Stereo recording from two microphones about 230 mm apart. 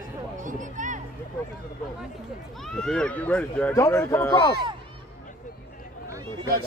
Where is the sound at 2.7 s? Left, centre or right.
Centre.